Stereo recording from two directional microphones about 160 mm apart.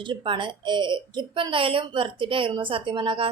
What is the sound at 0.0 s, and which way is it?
A woman's voice, 30° right (ahead or behind).